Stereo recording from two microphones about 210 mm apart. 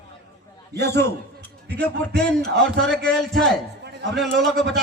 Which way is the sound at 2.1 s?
5° left (ahead or behind).